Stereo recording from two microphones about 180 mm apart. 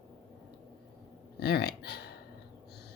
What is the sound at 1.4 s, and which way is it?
Speech, 65° left (ahead or behind).